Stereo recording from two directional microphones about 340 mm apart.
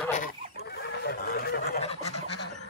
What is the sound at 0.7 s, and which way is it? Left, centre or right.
Fowl, left.